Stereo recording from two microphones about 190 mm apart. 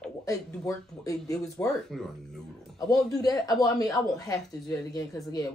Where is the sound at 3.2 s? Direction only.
20° left (ahead or behind).